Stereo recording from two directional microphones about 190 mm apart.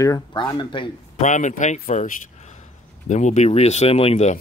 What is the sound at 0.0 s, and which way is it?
Speech, 20° left (ahead or behind).